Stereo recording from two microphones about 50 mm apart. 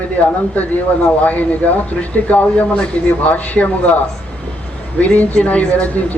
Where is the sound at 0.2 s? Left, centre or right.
Left.